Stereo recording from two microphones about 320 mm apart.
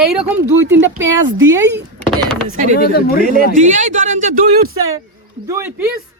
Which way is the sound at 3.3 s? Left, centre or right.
Right.